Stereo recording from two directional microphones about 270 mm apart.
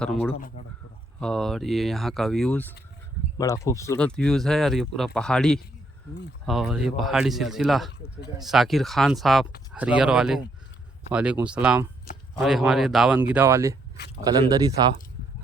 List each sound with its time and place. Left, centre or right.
0.0 s speech: centre
14.8 s speech: centre